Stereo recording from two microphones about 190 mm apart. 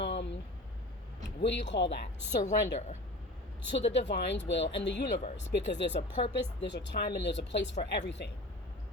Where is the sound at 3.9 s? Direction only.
65° left (ahead or behind).